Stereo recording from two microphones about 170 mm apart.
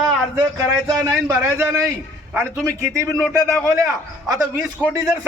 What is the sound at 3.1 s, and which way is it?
Speech, 5° left (ahead or behind).